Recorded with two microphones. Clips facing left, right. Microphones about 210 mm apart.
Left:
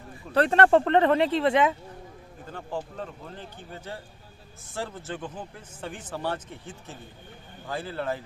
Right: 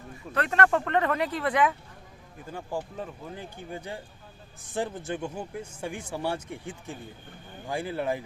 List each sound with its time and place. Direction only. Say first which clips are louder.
0.3 s speech: left 5 dB; 30° left (ahead or behind)
2.5 s speech: even; 10° right (ahead or behind)